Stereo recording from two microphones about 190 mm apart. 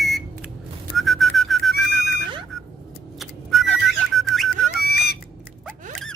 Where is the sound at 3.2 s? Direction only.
Centre (ahead or behind).